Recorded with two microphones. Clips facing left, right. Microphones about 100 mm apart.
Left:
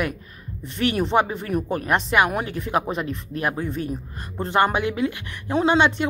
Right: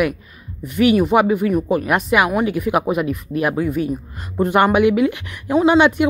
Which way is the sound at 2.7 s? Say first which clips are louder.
Right 3 dB; 15° right (ahead or behind).